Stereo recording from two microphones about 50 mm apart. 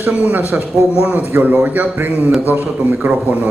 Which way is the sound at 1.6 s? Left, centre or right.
Right.